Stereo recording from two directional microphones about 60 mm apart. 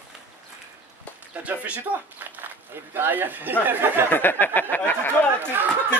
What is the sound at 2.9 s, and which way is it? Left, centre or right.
Speech, right.